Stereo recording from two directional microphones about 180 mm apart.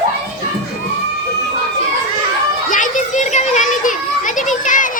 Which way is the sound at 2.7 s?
45° left (ahead or behind).